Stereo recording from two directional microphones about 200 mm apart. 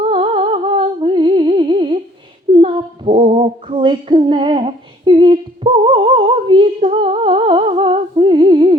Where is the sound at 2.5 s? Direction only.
25° right (ahead or behind).